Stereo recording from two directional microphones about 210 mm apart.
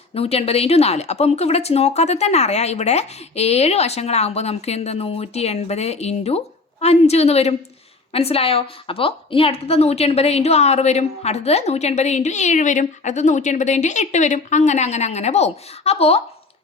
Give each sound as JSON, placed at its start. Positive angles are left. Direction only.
{"t": 0.1, "sound": "a woman's voice", "side_deg": 30}